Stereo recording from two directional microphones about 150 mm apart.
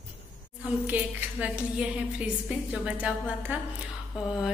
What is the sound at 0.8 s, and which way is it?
A woman's voice, 10° right (ahead or behind).